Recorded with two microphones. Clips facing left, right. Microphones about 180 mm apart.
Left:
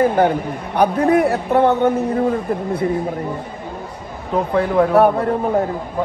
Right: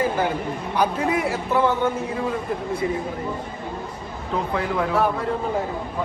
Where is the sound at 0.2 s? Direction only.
60° left (ahead or behind).